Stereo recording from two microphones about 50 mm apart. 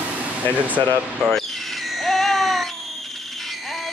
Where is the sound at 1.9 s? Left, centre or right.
Centre.